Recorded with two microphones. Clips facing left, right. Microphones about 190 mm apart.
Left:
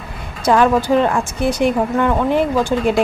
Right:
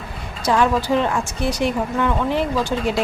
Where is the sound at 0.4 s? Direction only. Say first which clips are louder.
Left 4 dB; 55° left (ahead or behind).